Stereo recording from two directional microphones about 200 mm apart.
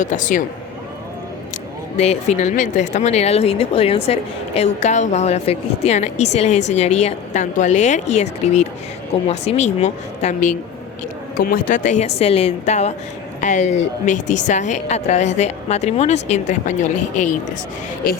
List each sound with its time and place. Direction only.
0.0 s speech: 40° left (ahead or behind)
2.0 s speech: 35° left (ahead or behind)